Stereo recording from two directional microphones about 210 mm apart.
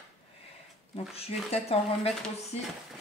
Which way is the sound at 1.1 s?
30° left (ahead or behind).